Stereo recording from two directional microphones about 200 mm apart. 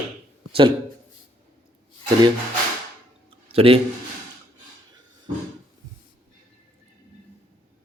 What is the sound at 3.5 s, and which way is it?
Speech, 30° right (ahead or behind).